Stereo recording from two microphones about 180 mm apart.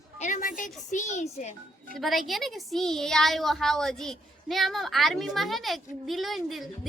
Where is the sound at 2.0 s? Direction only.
Centre (ahead or behind).